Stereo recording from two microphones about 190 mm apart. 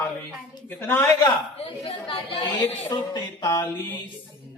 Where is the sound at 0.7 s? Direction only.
10° left (ahead or behind).